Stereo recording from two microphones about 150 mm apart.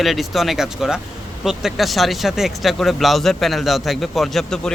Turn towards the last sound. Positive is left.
turn(degrees=5)  # may be behind; listen again after turning